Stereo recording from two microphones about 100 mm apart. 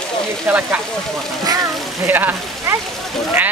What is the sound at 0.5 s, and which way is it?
Speech, 20° right (ahead or behind).